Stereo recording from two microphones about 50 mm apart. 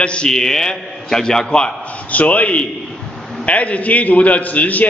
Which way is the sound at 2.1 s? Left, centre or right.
Left.